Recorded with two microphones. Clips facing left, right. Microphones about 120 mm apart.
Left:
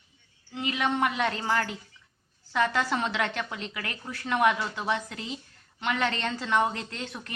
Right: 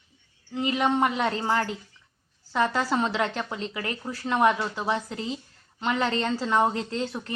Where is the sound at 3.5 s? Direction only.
30° right (ahead or behind).